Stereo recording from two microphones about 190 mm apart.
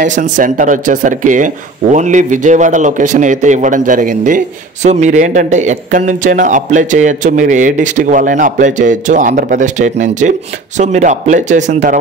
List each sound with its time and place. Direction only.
0.0 s a man's voice: 40° right (ahead or behind)